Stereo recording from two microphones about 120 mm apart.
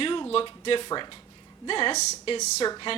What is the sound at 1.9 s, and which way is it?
Speech, 70° left (ahead or behind).